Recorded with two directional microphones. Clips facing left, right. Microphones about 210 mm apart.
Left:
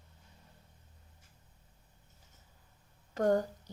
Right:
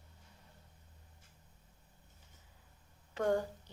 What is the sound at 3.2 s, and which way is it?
Speech, 40° left (ahead or behind).